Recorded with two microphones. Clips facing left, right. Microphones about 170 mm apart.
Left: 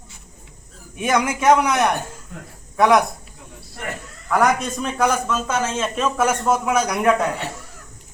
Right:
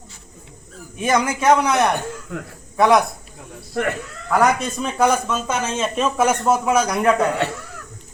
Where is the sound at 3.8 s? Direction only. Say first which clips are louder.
Right 10 dB; 80° right.